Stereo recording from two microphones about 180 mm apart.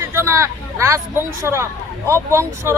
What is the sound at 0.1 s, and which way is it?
Speech, 15° right (ahead or behind).